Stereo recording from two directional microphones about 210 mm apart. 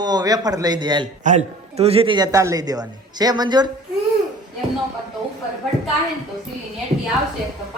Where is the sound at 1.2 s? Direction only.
35° right (ahead or behind); by 3.7 s 20° right (ahead or behind).